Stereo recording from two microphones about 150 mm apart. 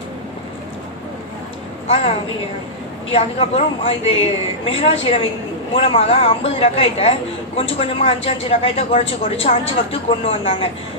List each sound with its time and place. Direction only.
3.1 s a woman's voice: 40° left (ahead or behind)